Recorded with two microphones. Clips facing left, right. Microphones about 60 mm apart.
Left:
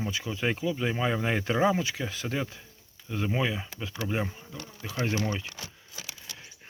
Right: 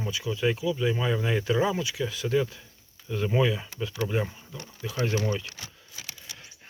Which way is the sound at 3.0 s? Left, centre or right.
Centre.